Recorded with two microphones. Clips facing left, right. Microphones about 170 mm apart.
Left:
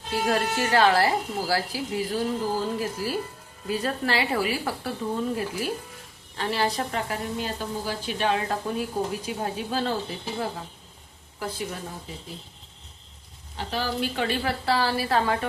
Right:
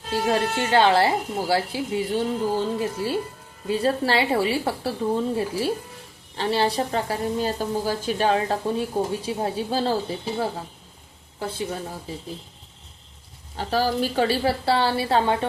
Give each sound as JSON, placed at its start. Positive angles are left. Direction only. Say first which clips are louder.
{"t": 0.1, "sound": "speech", "louder": "right 2 dB", "side_deg": -25}
{"t": 13.6, "sound": "a woman's voice", "louder": "right 5 dB", "side_deg": -40}